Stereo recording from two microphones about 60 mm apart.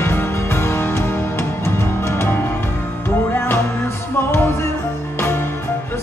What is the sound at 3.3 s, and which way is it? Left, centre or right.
Music, left.